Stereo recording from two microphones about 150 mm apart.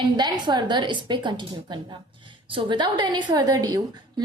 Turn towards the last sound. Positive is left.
turn(degrees=-25)  # may be behind; listen again after turning